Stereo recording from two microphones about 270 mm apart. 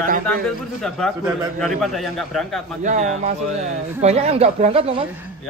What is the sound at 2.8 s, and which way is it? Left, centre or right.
Speech, right.